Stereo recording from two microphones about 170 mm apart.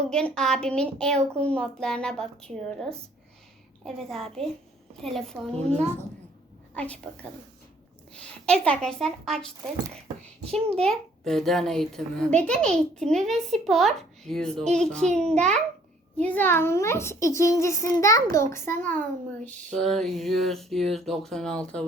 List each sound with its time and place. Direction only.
0.0 s speech: 5° left (ahead or behind)
5.5 s a child's voice: 40° right (ahead or behind)
6.7 s a child's voice: 5° left (ahead or behind)
10.4 s a child's voice: 35° right (ahead or behind)
10.8 s a child's voice: centre (ahead or behind)